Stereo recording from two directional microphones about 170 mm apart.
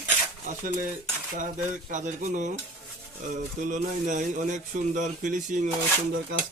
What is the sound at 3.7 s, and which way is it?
Speech, 45° right (ahead or behind).